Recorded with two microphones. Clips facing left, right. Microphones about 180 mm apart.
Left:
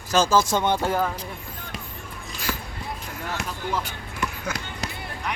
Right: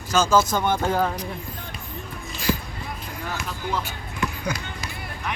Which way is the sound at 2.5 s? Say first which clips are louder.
Right 7 dB; 20° right (ahead or behind).